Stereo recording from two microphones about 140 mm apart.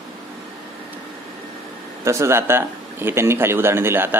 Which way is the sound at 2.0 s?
20° right (ahead or behind).